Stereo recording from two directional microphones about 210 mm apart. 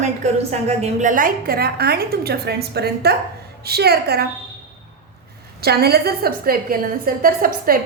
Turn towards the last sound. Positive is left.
turn(degrees=-45)  # may be behind; listen again after turning